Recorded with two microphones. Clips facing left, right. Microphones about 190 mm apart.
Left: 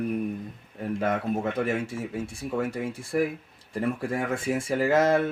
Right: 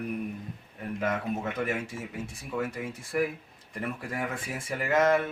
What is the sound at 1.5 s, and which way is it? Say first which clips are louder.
Speech: left 4 dB; 30° left (ahead or behind).